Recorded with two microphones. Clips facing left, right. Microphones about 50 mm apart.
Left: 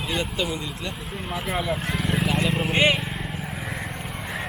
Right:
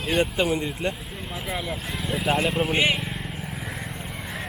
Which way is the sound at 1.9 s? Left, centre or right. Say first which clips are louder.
Left 3 dB; left.